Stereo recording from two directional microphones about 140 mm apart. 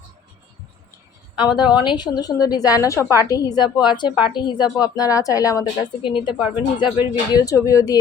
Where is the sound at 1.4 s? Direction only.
30° left (ahead or behind).